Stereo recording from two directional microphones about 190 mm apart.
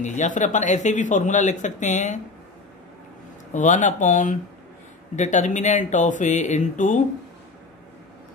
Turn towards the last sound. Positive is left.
turn(degrees=40)  # may be behind; listen again after turning